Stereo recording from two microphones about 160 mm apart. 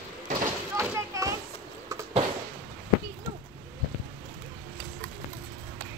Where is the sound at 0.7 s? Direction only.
20° right (ahead or behind).